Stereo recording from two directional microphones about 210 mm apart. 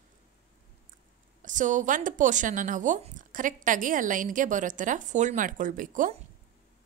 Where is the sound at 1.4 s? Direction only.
35° right (ahead or behind).